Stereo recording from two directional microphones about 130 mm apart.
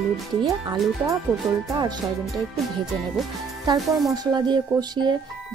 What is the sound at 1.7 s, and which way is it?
Wind chime, 30° right (ahead or behind).